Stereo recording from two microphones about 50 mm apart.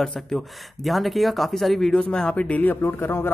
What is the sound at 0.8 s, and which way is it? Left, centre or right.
Speech, centre.